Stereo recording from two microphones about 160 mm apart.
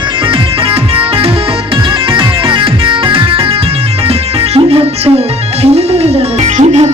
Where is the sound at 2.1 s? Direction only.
30° right (ahead or behind).